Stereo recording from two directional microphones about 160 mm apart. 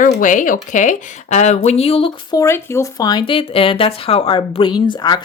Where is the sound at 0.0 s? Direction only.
55° left (ahead or behind); by 2.1 s 35° left (ahead or behind).